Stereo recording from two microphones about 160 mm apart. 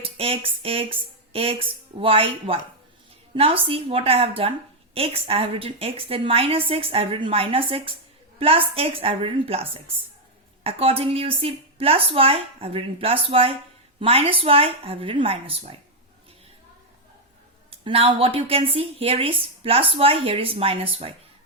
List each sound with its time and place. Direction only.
0.0 s speech: 35° right (ahead or behind)
17.7 s speech: 35° right (ahead or behind)